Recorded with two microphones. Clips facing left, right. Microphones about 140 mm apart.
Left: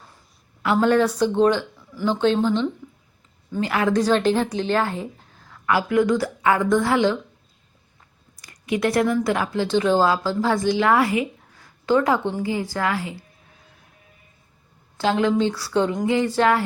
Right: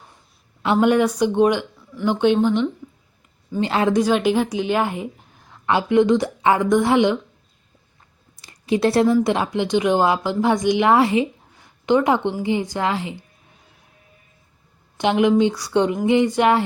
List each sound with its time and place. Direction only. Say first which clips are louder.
0.6 s a woman's voice: right 1 dB; 20° right (ahead or behind)
3.9 s a woman's voice: left 1 dB; 10° right (ahead or behind)
8.4 s a sound: right 4 dB; 30° right (ahead or behind)
9.2 s speech: right 2 dB; 20° right (ahead or behind)
14.9 s a woman's voice: right 3 dB; 20° right (ahead or behind)